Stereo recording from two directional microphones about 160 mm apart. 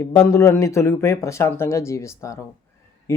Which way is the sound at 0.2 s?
20° left (ahead or behind).